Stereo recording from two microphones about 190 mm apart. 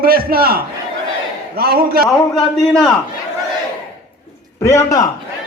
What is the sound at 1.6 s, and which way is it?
Speech, 55° right (ahead or behind).